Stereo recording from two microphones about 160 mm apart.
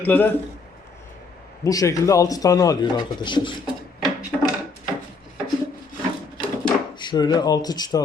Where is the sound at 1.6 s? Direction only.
20° left (ahead or behind).